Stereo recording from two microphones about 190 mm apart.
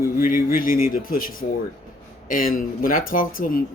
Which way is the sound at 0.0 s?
45° left (ahead or behind).